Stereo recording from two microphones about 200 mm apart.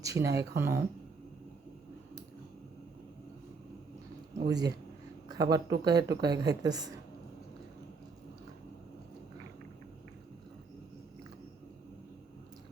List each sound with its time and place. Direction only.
0.0 s speech: 15° right (ahead or behind)
4.4 s speech: 20° right (ahead or behind)